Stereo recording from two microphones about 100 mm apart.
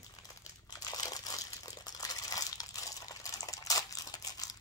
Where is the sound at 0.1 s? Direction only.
40° left (ahead or behind).